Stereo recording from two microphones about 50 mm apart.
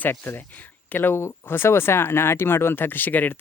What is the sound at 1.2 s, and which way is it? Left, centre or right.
Speech, left.